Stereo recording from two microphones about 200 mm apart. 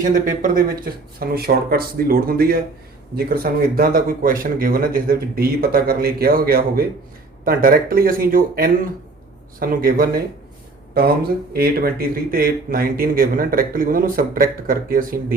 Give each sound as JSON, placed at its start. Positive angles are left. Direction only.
{"t": 0.0, "sound": "speech", "side_deg": -40}